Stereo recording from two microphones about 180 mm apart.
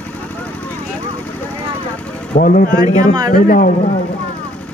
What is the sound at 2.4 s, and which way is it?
Speech, 50° left (ahead or behind).